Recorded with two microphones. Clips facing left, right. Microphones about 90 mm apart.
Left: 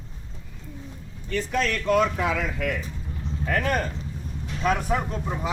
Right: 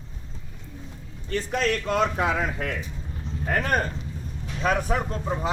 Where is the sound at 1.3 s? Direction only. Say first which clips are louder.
Even; 35° right (ahead or behind).